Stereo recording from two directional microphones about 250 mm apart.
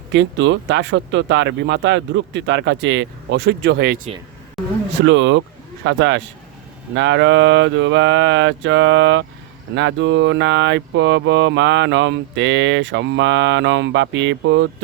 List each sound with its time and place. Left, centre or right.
0.1 s speech: right
5.0 s speech: right